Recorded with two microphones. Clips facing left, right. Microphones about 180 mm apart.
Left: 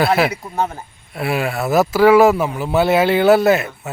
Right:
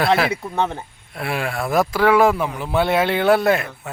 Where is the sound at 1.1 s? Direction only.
5° left (ahead or behind).